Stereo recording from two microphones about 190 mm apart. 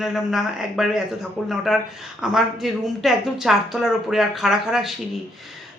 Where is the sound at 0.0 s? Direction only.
Centre (ahead or behind).